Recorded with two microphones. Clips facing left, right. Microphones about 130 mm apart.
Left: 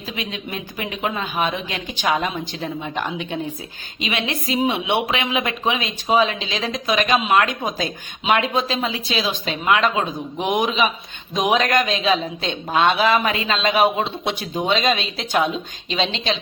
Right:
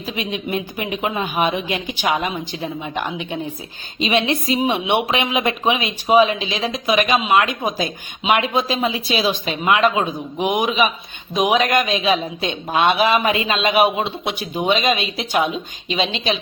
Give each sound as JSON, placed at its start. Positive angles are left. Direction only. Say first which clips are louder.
{"t": 0.2, "sound": "speech", "louder": "right 7 dB", "side_deg": -20}
{"t": 10.3, "sound": "a man's voice", "louder": "right 2 dB", "side_deg": -5}
{"t": 11.6, "sound": "speech", "louder": "right 1 dB", "side_deg": -15}